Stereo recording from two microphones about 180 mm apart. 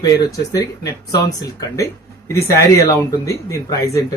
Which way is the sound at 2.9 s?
20° left (ahead or behind).